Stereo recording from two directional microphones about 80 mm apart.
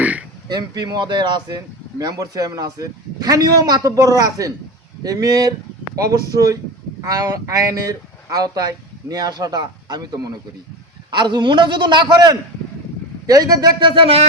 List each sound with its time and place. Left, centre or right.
0.0 s a sound: centre
0.4 s speech: right
11.1 s a man's voice: right